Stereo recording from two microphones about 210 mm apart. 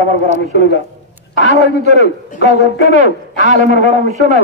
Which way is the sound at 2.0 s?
35° right (ahead or behind).